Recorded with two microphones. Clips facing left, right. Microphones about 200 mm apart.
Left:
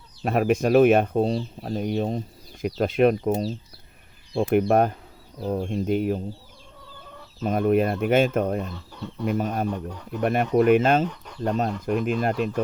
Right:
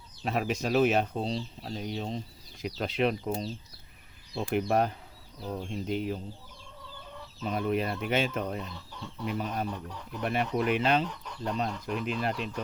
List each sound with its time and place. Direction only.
0.3 s speech: 55° left (ahead or behind)
4.7 s speech: 55° left (ahead or behind)
7.4 s speech: 50° left (ahead or behind)